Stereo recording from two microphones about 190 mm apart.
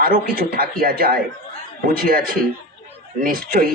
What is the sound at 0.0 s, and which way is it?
Speech, 50° right (ahead or behind).